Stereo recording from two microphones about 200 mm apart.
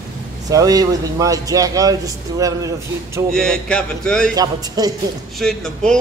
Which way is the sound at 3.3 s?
5° left (ahead or behind).